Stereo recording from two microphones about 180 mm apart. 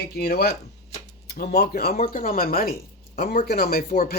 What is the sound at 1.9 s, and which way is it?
Speech, 45° left (ahead or behind).